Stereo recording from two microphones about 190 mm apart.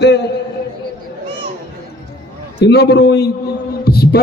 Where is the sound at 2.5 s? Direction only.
60° left (ahead or behind).